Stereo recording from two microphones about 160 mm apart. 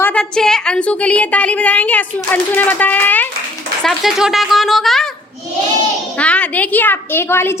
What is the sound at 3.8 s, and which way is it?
A woman's voice, centre (ahead or behind).